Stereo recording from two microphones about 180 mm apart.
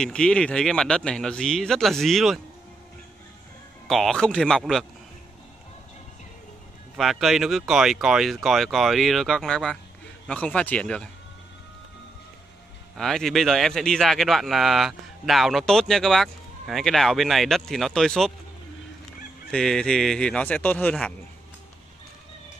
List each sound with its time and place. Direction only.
0.0 s speech: 5° left (ahead or behind)
3.8 s speech: centre (ahead or behind)
7.0 s speech: centre (ahead or behind)
12.9 s speech: centre (ahead or behind)
19.5 s speech: 5° left (ahead or behind)